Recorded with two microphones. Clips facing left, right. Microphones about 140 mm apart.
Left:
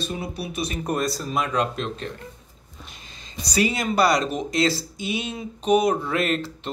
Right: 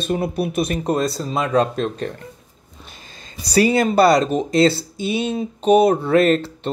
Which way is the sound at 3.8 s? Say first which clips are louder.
Right 5 dB; 30° right (ahead or behind).